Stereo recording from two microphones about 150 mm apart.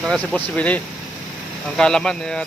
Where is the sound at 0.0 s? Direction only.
Centre (ahead or behind).